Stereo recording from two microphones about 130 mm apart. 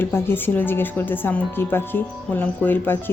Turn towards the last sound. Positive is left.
turn(degrees=15)  # may be behind; listen again after turning